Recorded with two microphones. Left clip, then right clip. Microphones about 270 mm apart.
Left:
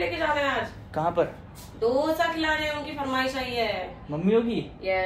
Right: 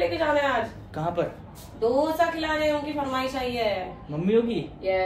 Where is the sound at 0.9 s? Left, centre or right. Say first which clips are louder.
Left 3 dB; left.